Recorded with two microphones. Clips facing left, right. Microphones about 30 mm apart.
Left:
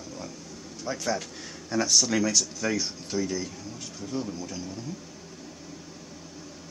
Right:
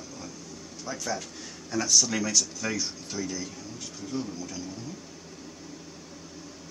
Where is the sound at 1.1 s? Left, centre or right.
Left.